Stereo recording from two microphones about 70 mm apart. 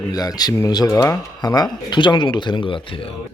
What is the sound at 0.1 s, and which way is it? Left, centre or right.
Speech, left.